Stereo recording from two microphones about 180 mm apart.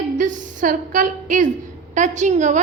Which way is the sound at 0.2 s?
45° right (ahead or behind).